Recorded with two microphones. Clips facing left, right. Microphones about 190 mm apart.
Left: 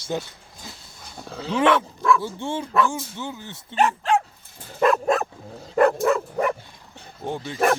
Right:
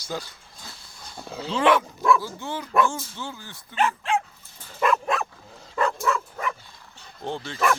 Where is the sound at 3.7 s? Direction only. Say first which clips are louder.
Left 4 dB; 40° left (ahead or behind).